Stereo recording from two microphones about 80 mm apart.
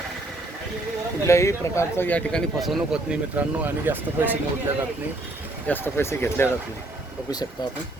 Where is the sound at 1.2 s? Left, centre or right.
Left.